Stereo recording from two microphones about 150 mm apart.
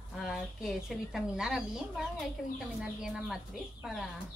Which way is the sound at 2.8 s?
5° right (ahead or behind).